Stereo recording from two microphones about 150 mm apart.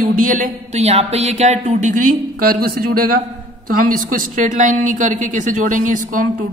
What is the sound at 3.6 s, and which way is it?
A woman's voice, 70° right (ahead or behind).